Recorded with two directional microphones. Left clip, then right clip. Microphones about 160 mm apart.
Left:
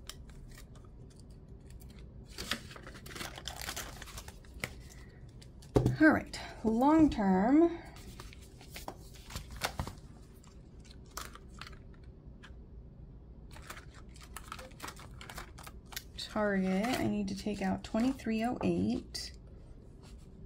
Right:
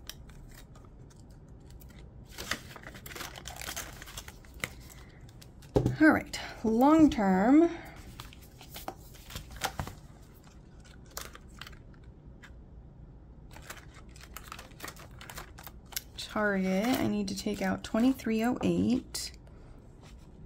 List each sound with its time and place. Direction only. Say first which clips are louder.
2.3 s a sound: right 2 dB; 10° right (ahead or behind)
5.7 s speech: right 2 dB; 5° right (ahead or behind)
6.3 s speech: right 4 dB; 20° right (ahead or behind)
14.8 s typing: right 1 dB; 10° right (ahead or behind)
15.9 s a sound: right 3 dB; 10° right (ahead or behind)
16.9 s speech: right 3 dB; 25° right (ahead or behind)